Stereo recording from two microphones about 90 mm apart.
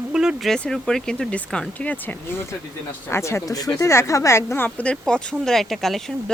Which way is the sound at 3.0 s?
30° left (ahead or behind).